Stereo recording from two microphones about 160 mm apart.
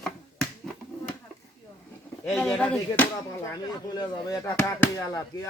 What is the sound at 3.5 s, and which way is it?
Speech, 25° left (ahead or behind).